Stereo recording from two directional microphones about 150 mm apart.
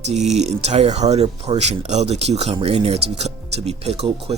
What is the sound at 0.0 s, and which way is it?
Speech, 50° right (ahead or behind).